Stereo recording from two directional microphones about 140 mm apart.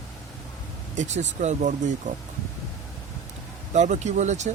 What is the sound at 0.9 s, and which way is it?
Speech, 55° right (ahead or behind).